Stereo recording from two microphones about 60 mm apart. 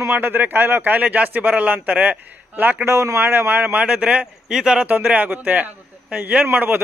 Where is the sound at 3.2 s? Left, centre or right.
Right.